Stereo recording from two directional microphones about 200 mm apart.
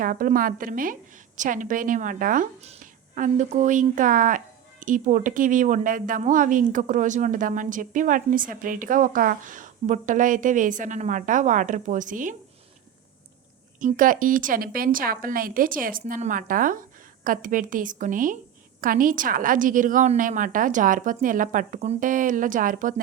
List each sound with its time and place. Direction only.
0.0 s speech: 45° right (ahead or behind)
13.7 s speech: 40° right (ahead or behind)